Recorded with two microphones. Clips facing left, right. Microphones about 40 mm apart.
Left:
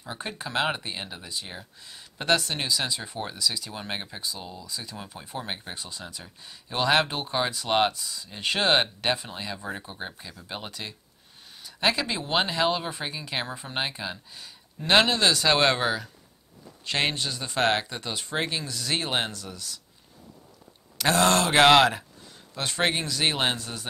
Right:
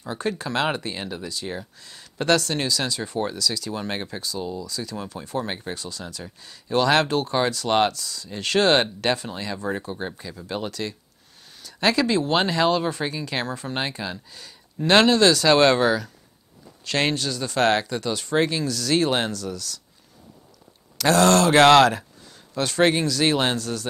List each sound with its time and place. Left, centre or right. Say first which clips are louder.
0.1 s speech: right 5 dB; centre
21.0 s speech: right 5 dB; left